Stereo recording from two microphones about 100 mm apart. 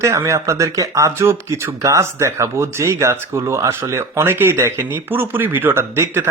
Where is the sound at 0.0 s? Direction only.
30° right (ahead or behind).